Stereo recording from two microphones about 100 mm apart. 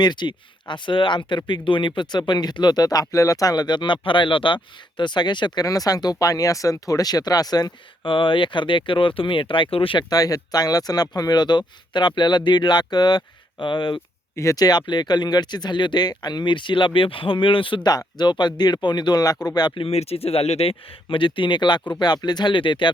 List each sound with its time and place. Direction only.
0.0 s speech: 50° left (ahead or behind)
8.0 s speech: 60° left (ahead or behind)
10.0 s speech: 40° left (ahead or behind)
14.3 s speech: 35° left (ahead or behind); by 17.9 s 60° left (ahead or behind)
17.9 s speech: 45° left (ahead or behind)
19.8 s speech: 90° left; by 22.9 s 55° left (ahead or behind)